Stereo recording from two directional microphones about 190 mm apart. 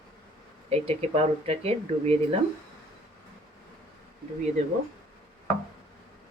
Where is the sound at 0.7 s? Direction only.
30° right (ahead or behind).